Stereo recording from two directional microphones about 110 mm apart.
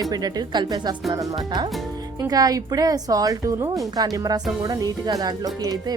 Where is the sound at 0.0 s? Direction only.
35° right (ahead or behind).